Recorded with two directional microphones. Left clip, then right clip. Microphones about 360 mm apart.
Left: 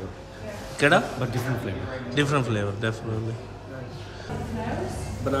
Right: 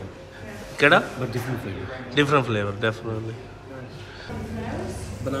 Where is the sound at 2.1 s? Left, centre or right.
Centre.